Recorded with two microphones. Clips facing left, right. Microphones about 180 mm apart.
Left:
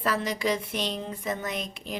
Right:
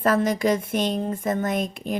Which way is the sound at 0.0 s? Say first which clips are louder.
Right 7 dB; 50° right (ahead or behind).